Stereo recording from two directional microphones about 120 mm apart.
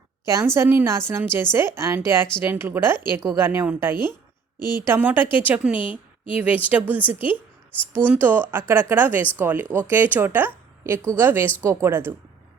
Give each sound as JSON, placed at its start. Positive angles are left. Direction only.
{"t": 0.3, "sound": "a woman's voice", "side_deg": -25}